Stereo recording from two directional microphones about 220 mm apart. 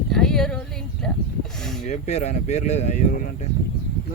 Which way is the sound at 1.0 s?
5° left (ahead or behind).